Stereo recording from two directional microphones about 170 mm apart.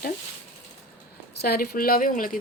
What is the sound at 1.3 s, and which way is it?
Speech, 65° left (ahead or behind).